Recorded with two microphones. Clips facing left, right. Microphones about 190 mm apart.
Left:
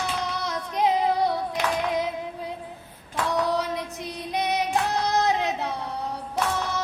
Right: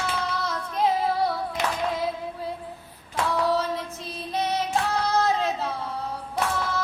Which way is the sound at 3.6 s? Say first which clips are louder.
Even; 15° left (ahead or behind).